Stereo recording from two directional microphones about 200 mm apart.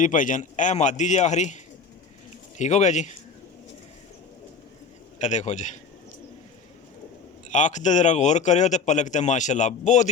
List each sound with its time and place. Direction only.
0.0 s a man's voice: 40° left (ahead or behind)
2.6 s a man's voice: 35° left (ahead or behind)
5.2 s a man's voice: 35° left (ahead or behind)
7.5 s a man's voice: 40° left (ahead or behind)